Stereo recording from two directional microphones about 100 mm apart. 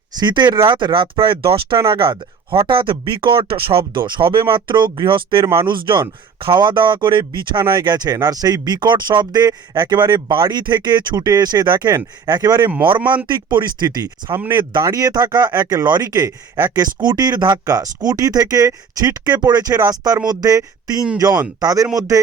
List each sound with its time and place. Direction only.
0.2 s speech: 50° right (ahead or behind)
14.5 s speech: 50° right (ahead or behind)
14.8 s speech: 35° right (ahead or behind)